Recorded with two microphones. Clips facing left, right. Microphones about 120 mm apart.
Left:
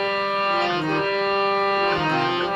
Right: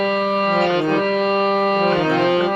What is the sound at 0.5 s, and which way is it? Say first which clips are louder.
Music: right 6 dB; 50° right (ahead or behind).